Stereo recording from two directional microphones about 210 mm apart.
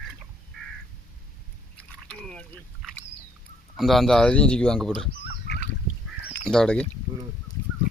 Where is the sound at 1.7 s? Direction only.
5° left (ahead or behind).